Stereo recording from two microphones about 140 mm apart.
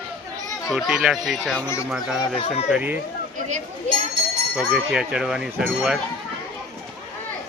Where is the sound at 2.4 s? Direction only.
50° left (ahead or behind).